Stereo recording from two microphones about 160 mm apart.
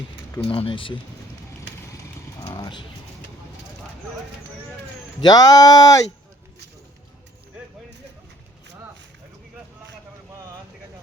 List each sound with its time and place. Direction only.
0.4 s speech: 30° left (ahead or behind)
2.4 s mechanisms: 30° left (ahead or behind)
5.2 s speech: 25° left (ahead or behind)